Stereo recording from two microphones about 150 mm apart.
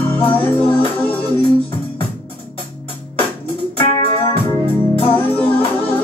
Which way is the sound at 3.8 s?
35° left (ahead or behind).